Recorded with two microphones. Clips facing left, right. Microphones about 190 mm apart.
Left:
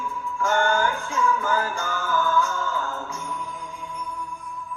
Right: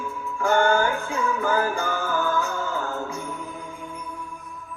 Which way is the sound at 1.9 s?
40° right (ahead or behind).